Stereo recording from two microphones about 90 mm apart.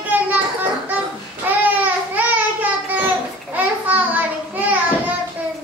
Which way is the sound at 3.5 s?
20° right (ahead or behind).